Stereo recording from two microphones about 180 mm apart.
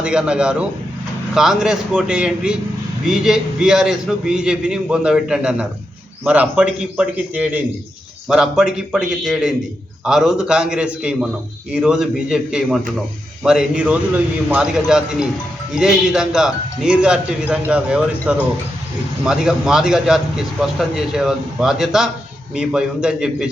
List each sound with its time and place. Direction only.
0.0 s a man's voice: 5° right (ahead or behind)